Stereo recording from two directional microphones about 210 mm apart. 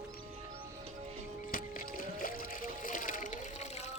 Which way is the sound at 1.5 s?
40° left (ahead or behind).